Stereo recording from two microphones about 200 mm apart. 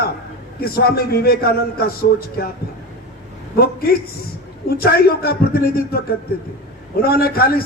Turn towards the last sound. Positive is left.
turn(degrees=50)  # may be behind; listen again after turning